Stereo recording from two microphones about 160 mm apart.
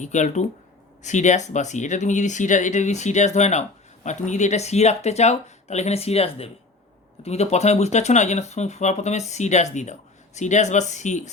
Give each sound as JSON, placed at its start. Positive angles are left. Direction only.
{"t": 0.0, "sound": "speech", "side_deg": 50}